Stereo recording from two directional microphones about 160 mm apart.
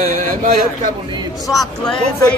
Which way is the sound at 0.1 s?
60° right (ahead or behind).